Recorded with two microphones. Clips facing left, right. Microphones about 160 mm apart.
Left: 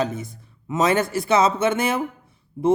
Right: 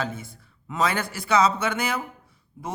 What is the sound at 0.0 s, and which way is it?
Speech, 20° left (ahead or behind).